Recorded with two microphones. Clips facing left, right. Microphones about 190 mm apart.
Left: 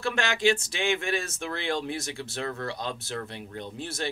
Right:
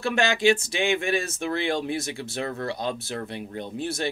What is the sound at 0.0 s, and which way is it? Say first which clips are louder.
Speech: right 4 dB; 15° right (ahead or behind).